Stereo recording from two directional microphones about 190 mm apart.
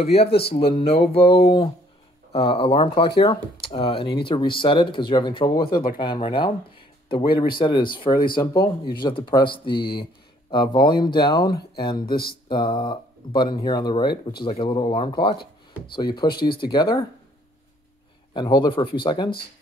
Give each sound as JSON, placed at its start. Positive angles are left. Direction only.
{"t": 0.0, "sound": "speech", "side_deg": 30}
{"t": 8.1, "sound": "speech", "side_deg": 50}
{"t": 8.4, "sound": "speech", "side_deg": 20}
{"t": 16.3, "sound": "speech", "side_deg": 55}
{"t": 16.6, "sound": "speech", "side_deg": 20}
{"t": 18.3, "sound": "speech", "side_deg": 25}